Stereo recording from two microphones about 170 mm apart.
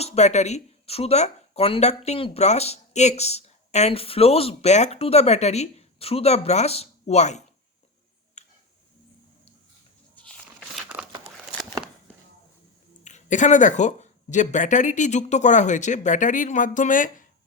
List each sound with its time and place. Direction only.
0.0 s speech: 40° left (ahead or behind)
10.2 s a sound: 5° left (ahead or behind)
13.1 s speech: 45° left (ahead or behind)